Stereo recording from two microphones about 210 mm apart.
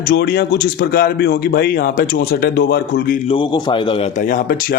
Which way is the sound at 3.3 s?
20° left (ahead or behind).